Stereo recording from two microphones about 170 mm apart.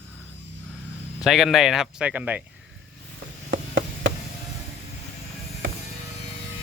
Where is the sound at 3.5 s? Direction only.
90° right.